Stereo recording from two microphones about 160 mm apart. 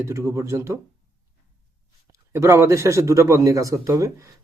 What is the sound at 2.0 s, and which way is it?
A man's voice, 20° right (ahead or behind).